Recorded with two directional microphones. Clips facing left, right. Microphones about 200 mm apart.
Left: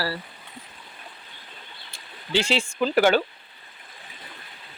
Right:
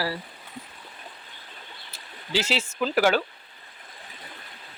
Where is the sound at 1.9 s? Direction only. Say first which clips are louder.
Left 3 dB; 5° right (ahead or behind).